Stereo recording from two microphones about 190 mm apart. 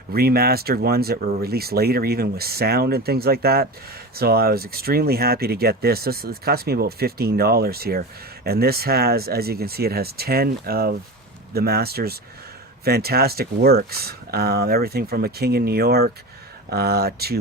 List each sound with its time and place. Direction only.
0.1 s speech: 55° right (ahead or behind)